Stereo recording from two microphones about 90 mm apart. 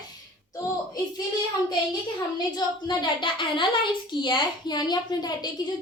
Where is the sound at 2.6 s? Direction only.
55° left (ahead or behind).